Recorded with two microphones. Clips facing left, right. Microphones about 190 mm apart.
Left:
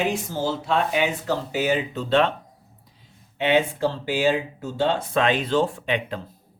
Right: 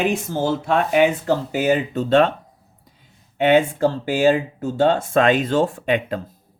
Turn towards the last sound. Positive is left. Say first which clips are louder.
# right 5 dB
turn(degrees=-45)  # may be behind; listen again after turning